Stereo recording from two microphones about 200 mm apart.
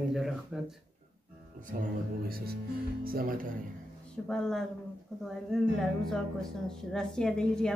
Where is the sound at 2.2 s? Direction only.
50° right (ahead or behind).